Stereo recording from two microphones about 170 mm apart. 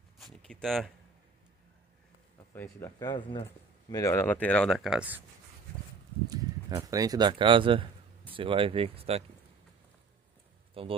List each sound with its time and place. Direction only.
0.2 s speech: 5° left (ahead or behind)
2.5 s speech: 15° left (ahead or behind); by 5.2 s 5° right (ahead or behind)
6.3 s speech: 20° right (ahead or behind)
10.7 s a sound: 30° right (ahead or behind)